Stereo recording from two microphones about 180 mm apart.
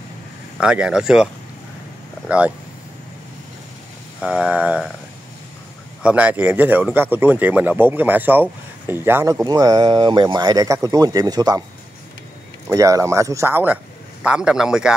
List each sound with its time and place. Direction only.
0.6 s a man's voice: 5° right (ahead or behind)
4.2 s a man's voice: 5° right (ahead or behind)
6.0 s speech: 10° right (ahead or behind)
12.6 s a man's voice: 20° right (ahead or behind)